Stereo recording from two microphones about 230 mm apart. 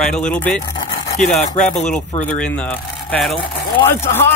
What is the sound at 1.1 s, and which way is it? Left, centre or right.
Speech, left.